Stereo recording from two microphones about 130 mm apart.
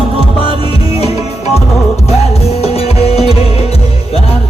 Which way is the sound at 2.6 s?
50° left (ahead or behind).